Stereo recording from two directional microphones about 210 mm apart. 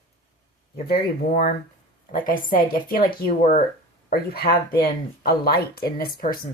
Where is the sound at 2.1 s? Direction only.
40° left (ahead or behind).